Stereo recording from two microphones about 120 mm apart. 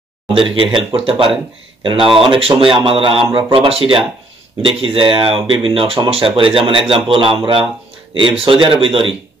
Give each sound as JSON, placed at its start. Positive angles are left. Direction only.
{"t": 0.3, "sound": "speech", "side_deg": -45}